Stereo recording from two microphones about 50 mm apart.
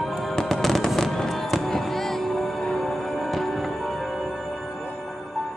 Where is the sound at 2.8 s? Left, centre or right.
Centre.